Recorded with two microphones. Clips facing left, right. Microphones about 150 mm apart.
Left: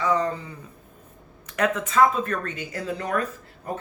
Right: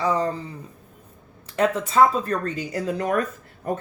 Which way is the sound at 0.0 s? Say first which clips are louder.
Right 1 dB; 30° right (ahead or behind).